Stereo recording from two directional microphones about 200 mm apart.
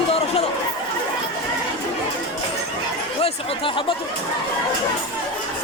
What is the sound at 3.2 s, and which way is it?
Speech, 25° left (ahead or behind).